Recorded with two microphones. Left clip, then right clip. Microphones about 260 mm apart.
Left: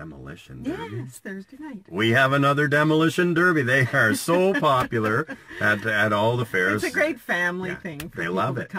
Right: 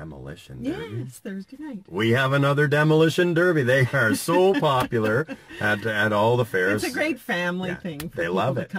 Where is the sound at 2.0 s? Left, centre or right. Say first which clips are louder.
Left 2 dB; centre.